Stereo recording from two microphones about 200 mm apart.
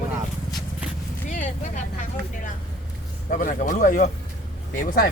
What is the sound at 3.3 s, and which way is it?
Speech, 40° left (ahead or behind).